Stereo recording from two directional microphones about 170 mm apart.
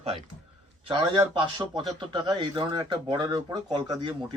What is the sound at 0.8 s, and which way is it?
A man's voice, 25° right (ahead or behind).